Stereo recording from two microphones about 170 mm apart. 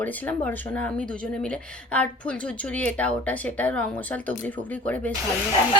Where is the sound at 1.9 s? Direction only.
5° left (ahead or behind).